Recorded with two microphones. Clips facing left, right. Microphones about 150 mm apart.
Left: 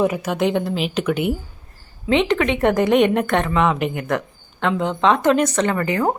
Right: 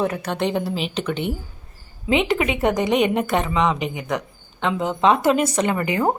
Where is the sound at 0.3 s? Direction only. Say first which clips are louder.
Left 3 dB; 5° left (ahead or behind).